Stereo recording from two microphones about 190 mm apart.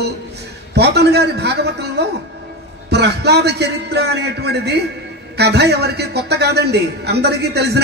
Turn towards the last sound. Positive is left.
turn(degrees=-60)  # may be behind; listen again after turning